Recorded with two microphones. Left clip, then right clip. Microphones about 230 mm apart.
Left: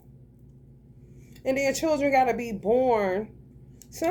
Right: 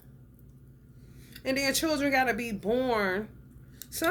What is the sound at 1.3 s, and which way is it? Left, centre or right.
A woman's voice, centre.